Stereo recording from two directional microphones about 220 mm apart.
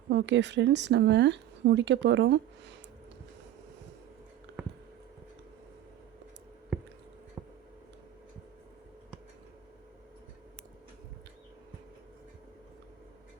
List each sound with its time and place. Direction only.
0.1 s speech: 50° right (ahead or behind)